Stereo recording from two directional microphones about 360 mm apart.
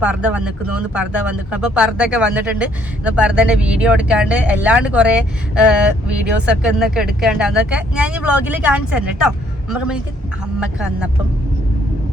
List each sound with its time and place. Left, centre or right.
0.0 s speech: centre